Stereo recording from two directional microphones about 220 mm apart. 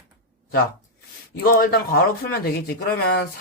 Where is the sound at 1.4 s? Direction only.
45° left (ahead or behind).